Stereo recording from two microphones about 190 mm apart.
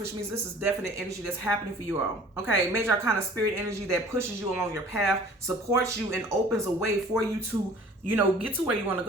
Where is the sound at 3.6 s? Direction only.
15° right (ahead or behind).